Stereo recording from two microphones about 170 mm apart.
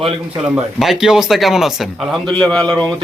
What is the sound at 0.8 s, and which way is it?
Speech, centre (ahead or behind).